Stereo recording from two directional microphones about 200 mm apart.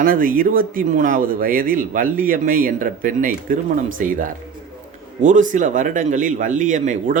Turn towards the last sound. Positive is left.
turn(degrees=-40)  # may be behind; listen again after turning